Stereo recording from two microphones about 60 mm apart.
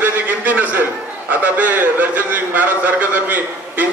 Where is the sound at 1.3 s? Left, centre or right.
Right.